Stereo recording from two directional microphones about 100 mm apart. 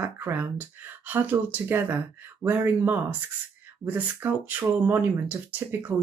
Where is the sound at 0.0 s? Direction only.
20° right (ahead or behind).